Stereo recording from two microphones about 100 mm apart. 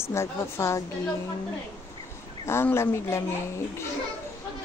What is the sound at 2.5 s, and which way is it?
Speech, 25° left (ahead or behind).